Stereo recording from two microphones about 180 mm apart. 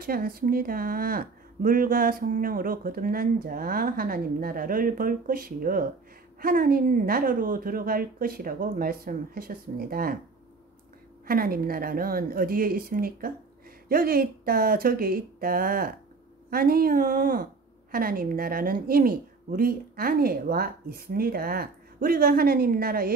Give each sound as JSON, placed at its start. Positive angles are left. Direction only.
{"t": 0.0, "sound": "a woman's voice", "side_deg": -55}
{"t": 11.2, "sound": "a woman's voice", "side_deg": -55}